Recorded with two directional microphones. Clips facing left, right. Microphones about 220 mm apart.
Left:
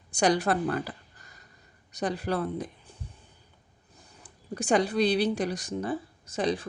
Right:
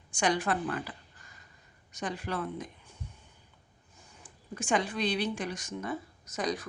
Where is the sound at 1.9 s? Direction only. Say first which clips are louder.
Left 6 dB; 35° left (ahead or behind).